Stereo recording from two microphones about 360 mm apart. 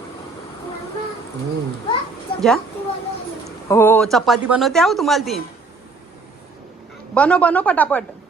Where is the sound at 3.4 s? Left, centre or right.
Centre.